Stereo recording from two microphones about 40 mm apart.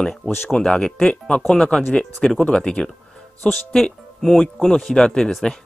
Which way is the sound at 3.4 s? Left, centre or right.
Centre.